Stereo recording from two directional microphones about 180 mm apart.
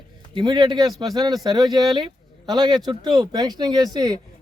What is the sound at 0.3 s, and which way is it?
A man's voice, 25° right (ahead or behind).